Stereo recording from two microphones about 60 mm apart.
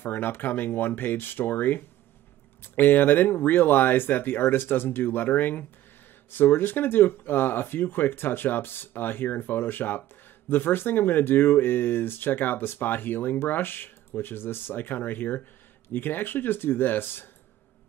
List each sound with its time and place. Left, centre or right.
0.0 s speech: left